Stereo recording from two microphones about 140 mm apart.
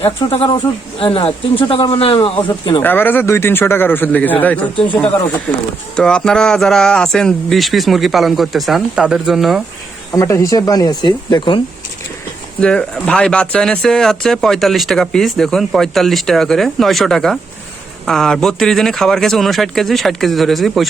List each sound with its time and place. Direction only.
0.0 s speech: 40° left (ahead or behind)
2.8 s a man's voice: 15° left (ahead or behind); by 9.6 s centre (ahead or behind)
10.1 s speech: 25° left (ahead or behind)
12.5 s speech: 5° left (ahead or behind)